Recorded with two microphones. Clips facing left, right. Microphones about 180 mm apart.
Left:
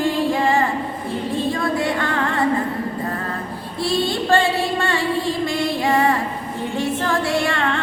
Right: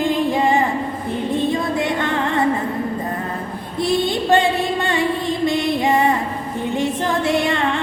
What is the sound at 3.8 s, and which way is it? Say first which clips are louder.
Music: right 2 dB; 20° right (ahead or behind).